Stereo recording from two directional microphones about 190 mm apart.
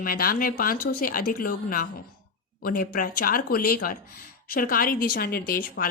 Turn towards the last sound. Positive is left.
turn(degrees=50)  # may be behind; listen again after turning